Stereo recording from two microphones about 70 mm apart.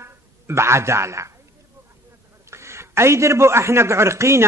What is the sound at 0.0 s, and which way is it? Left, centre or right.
Speech, right.